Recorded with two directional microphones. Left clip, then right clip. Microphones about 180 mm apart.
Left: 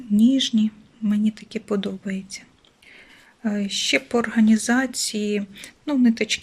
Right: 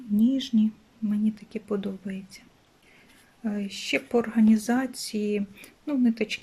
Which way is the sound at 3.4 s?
5° right (ahead or behind).